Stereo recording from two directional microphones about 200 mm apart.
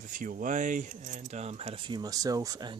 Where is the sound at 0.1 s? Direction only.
40° right (ahead or behind).